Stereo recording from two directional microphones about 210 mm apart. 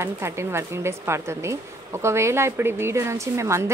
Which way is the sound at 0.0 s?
10° right (ahead or behind).